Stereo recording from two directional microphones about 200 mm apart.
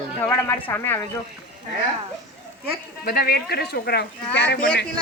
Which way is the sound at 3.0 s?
50° left (ahead or behind).